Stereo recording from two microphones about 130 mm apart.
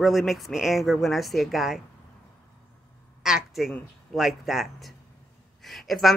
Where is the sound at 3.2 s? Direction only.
5° right (ahead or behind).